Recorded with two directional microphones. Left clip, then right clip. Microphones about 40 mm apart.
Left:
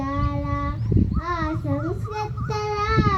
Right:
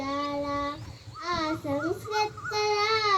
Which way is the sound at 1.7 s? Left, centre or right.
Right.